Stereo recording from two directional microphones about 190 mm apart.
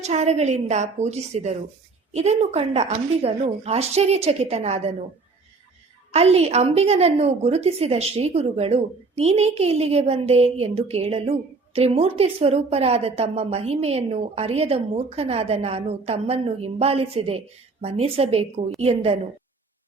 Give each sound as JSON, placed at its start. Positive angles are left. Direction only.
{"t": 0.0, "sound": "a woman's voice", "side_deg": -35}
{"t": 6.1, "sound": "a woman's voice", "side_deg": -35}